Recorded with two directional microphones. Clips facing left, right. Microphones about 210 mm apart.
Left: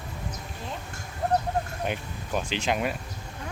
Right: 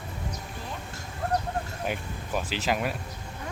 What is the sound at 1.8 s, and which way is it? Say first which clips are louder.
Speech: left 1 dB; 5° right (ahead or behind).